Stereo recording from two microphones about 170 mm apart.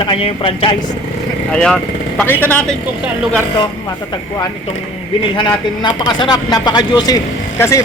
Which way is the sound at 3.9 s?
20° left (ahead or behind).